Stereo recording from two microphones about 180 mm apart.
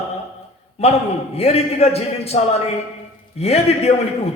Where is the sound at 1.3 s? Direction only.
35° left (ahead or behind).